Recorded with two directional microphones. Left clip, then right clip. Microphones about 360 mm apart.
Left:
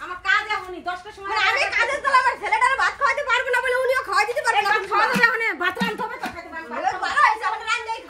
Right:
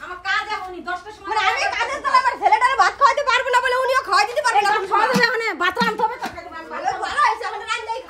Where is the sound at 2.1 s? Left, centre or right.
Right; by 4.7 s centre.